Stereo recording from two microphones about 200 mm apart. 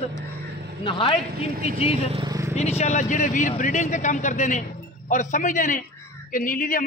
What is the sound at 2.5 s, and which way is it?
A man's voice, 35° left (ahead or behind).